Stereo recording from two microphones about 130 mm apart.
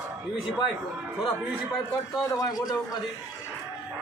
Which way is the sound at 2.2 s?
30° left (ahead or behind).